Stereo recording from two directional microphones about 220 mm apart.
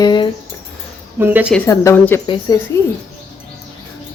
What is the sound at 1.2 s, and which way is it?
Speech, 10° right (ahead or behind).